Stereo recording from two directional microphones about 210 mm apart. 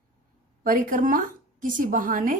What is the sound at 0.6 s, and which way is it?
A woman's voice, 40° right (ahead or behind).